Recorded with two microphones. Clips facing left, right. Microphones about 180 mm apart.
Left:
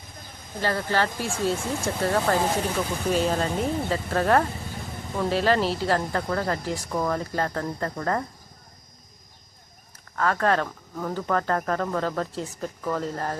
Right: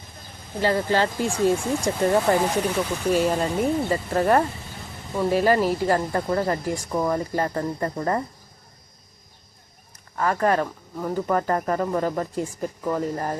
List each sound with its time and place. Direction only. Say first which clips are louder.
0.6 s speech: right 4 dB; 15° right (ahead or behind)
10.2 s speech: right 2 dB; 10° right (ahead or behind)